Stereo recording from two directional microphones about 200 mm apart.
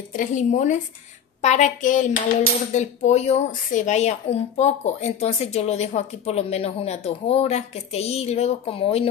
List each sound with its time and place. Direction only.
0.1 s speech: 40° left (ahead or behind)